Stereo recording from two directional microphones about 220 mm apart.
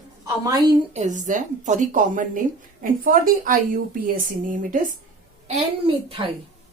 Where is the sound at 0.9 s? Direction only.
35° right (ahead or behind).